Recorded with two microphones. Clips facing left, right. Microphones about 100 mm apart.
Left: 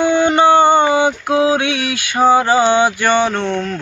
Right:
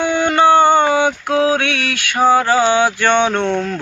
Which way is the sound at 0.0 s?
20° left (ahead or behind).